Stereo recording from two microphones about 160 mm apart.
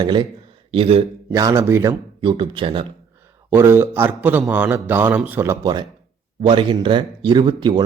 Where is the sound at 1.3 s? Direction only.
20° right (ahead or behind).